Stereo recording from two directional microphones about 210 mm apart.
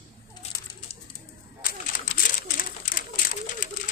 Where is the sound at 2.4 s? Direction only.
40° left (ahead or behind).